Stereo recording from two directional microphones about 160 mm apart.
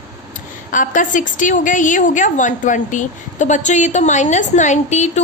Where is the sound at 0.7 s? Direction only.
55° left (ahead or behind).